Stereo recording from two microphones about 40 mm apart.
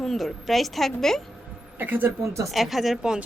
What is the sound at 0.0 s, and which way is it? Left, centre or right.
Speech, centre.